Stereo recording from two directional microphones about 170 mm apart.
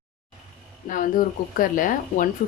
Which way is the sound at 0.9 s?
50° left (ahead or behind).